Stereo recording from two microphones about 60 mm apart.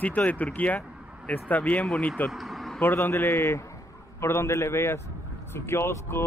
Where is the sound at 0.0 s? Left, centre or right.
Left.